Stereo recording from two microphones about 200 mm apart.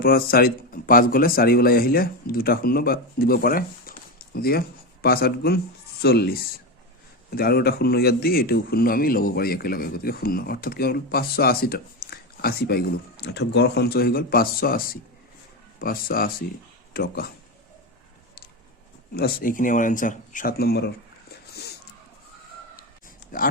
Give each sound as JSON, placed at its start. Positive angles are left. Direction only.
{"t": 0.0, "sound": "speech", "side_deg": 50}
{"t": 19.1, "sound": "speech", "side_deg": 50}
{"t": 21.5, "sound": "a sound", "side_deg": 55}
{"t": 23.3, "sound": "speech", "side_deg": 45}